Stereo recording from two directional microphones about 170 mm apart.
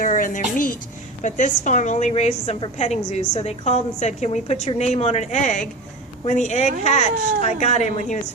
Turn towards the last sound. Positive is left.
turn(degrees=45)  # may be behind; listen again after turning